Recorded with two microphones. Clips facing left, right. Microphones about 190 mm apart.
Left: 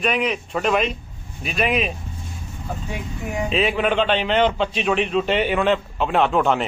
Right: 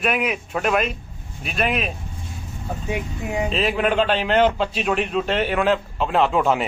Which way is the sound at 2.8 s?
15° right (ahead or behind).